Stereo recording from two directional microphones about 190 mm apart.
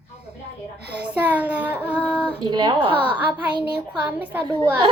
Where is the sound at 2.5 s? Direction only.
25° right (ahead or behind).